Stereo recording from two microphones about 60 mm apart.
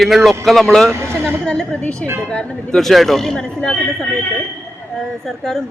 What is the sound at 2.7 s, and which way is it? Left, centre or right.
A woman's voice, centre.